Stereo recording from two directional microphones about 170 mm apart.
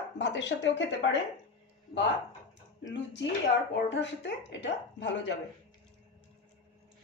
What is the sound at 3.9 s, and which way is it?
Speech, 90° left.